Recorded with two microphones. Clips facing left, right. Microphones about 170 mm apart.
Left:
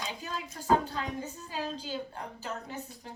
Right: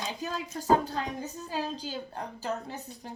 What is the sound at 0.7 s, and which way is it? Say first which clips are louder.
Speech: right 2 dB; 40° right (ahead or behind).